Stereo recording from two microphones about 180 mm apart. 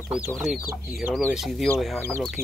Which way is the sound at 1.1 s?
Centre (ahead or behind).